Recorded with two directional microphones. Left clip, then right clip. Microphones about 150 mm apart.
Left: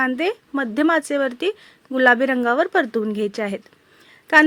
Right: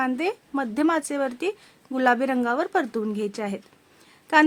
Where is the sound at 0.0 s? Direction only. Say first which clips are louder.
Left 4 dB; 15° left (ahead or behind).